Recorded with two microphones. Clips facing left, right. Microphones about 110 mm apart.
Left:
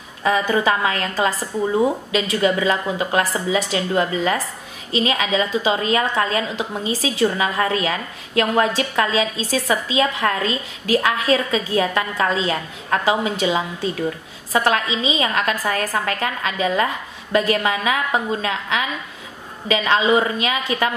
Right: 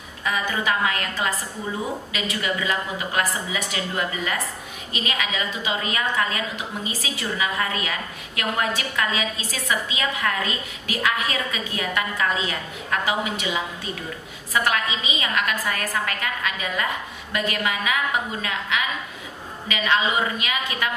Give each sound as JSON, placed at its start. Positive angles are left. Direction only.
{"t": 0.2, "sound": "a woman's voice", "side_deg": 35}